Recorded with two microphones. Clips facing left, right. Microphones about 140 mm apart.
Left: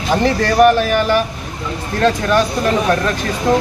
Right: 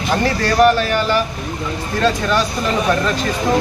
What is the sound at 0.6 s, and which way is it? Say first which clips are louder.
Speech: left 2 dB; 15° left (ahead or behind).